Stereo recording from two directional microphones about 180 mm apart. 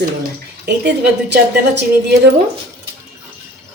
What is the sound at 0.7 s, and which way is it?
A woman's voice, 65° right (ahead or behind).